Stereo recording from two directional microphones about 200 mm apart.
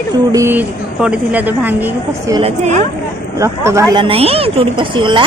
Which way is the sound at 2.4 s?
35° right (ahead or behind).